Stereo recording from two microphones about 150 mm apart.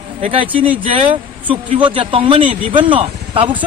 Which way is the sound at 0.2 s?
35° right (ahead or behind).